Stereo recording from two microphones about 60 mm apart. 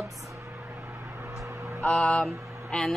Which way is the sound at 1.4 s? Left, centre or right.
Right.